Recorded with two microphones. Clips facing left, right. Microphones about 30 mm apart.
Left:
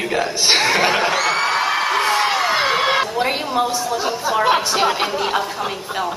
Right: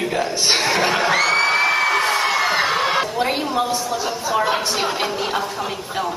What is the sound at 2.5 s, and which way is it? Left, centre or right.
Crowd, centre.